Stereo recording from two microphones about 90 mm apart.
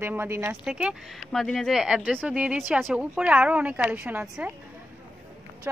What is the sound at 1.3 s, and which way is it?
A woman's voice, 5° left (ahead or behind).